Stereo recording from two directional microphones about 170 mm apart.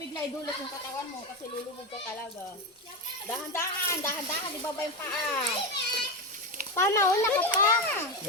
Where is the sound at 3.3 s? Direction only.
15° left (ahead or behind).